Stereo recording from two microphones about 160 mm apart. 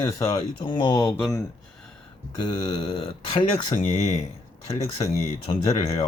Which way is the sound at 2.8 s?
35° left (ahead or behind).